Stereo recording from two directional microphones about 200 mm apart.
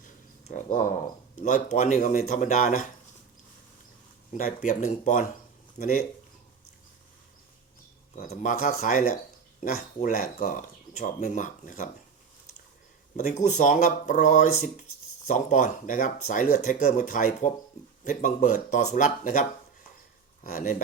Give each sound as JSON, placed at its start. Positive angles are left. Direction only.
{"t": 0.0, "sound": "a sound", "side_deg": 40}
{"t": 1.4, "sound": "speech", "side_deg": 40}
{"t": 4.4, "sound": "speech", "side_deg": 40}
{"t": 8.1, "sound": "speech", "side_deg": 40}
{"t": 13.1, "sound": "speech", "side_deg": 35}